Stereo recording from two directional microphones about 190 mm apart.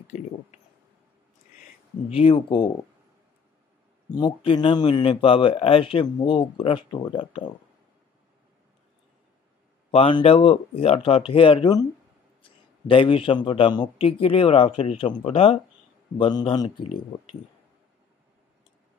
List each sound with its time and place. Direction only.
2.0 s speech: 30° left (ahead or behind)
4.1 s speech: 25° left (ahead or behind)
9.8 s speech: 25° left (ahead or behind)